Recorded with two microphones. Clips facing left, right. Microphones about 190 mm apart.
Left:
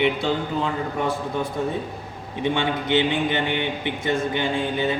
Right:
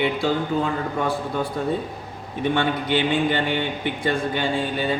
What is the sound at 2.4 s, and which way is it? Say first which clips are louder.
A man's voice: right 1 dB; 15° left (ahead or behind).